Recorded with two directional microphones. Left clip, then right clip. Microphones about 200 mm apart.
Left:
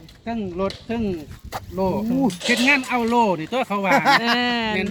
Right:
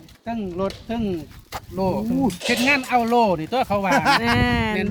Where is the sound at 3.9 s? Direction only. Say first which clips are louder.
Left 3 dB; 5° left (ahead or behind).